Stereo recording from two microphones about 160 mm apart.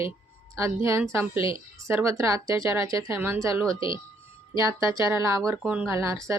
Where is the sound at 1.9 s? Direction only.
15° right (ahead or behind).